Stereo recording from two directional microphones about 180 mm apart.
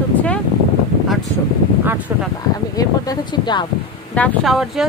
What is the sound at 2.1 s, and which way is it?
Speech, 15° right (ahead or behind).